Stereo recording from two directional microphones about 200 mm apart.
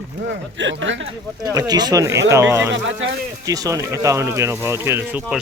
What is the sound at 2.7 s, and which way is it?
Speech, 70° right (ahead or behind).